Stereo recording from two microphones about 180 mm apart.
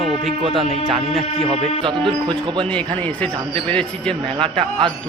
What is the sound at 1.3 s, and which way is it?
Music, 30° left (ahead or behind).